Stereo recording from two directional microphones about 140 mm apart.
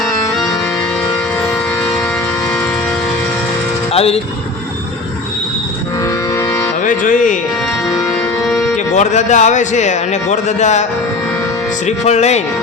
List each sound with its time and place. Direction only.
3.9 s speech: 45° left (ahead or behind)
6.3 s music: 20° left (ahead or behind)
6.8 s music: 70° left (ahead or behind)
9.0 s a man's voice: 60° left (ahead or behind)
11.9 s speech: 50° left (ahead or behind)